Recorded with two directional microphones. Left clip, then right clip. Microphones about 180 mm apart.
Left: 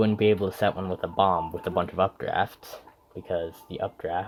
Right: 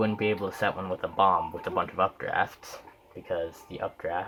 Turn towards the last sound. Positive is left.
turn(degrees=55)  # may be behind; listen again after turning